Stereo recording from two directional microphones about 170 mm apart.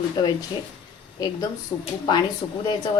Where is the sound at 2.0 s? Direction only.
25° left (ahead or behind).